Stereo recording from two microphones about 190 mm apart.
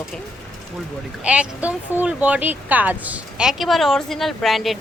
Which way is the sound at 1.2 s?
5° right (ahead or behind).